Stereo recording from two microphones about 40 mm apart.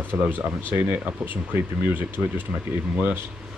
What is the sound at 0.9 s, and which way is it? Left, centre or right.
Speech, right.